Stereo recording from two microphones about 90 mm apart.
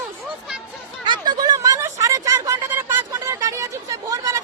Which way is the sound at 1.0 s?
55° right (ahead or behind).